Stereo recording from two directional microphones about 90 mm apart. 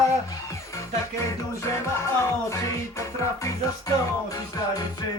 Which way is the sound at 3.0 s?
35° left (ahead or behind).